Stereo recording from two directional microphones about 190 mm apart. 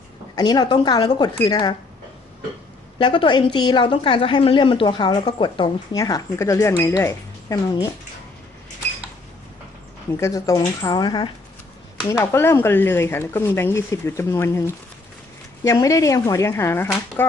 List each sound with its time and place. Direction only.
0.4 s a woman's voice: 20° left (ahead or behind)
3.0 s a woman's voice: 25° left (ahead or behind)
10.1 s a woman's voice: 15° left (ahead or behind)
15.6 s speech: 15° left (ahead or behind)